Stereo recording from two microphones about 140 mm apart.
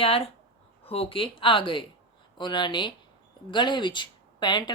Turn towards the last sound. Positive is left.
turn(degrees=30)  # may be behind; listen again after turning